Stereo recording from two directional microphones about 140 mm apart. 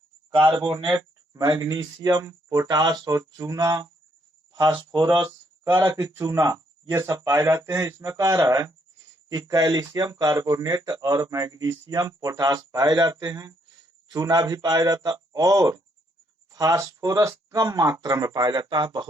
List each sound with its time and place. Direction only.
0.5 s speech: 35° right (ahead or behind)
5.8 s speech: 25° right (ahead or behind)